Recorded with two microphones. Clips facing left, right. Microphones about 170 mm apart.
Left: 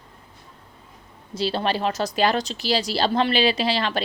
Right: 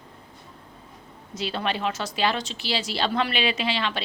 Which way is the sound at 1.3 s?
30° left (ahead or behind).